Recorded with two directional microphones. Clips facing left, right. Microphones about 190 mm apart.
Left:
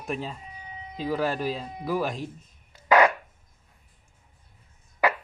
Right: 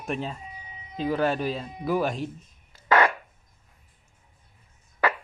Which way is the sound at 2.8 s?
15° left (ahead or behind).